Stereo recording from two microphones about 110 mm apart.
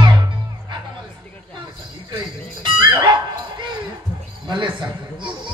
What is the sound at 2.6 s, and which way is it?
Music, 45° right (ahead or behind).